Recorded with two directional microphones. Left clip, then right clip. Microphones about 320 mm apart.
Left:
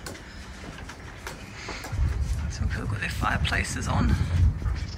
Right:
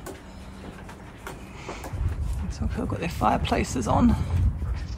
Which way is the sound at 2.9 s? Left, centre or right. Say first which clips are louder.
Right 4 dB; centre.